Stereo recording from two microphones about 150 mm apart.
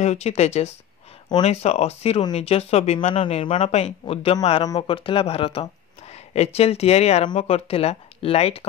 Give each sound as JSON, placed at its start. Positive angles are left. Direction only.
{"t": 0.0, "sound": "speech", "side_deg": 45}